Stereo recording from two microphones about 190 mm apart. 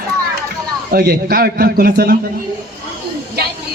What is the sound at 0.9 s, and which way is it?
Speech, 55° right (ahead or behind).